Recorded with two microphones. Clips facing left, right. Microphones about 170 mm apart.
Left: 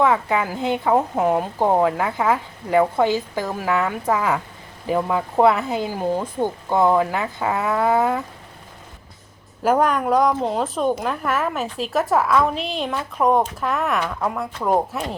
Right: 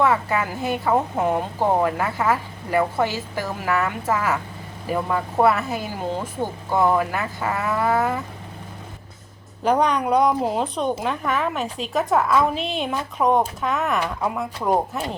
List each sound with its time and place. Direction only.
0.0 s a woman's voice: 15° left (ahead or behind)
9.6 s a woman's voice: 5° left (ahead or behind)